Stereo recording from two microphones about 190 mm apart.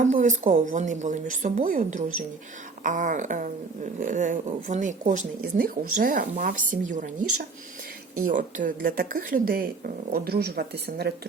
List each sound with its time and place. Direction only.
0.0 s speech: 40° right (ahead or behind); by 11.1 s 55° right (ahead or behind)